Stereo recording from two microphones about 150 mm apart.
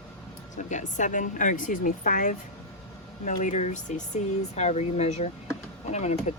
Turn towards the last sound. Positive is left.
turn(degrees=50)  # may be behind; listen again after turning